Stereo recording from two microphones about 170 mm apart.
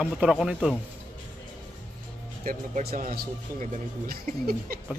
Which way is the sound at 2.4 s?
55° right (ahead or behind).